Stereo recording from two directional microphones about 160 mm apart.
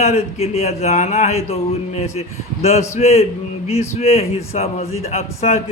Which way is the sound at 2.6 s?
40° left (ahead or behind).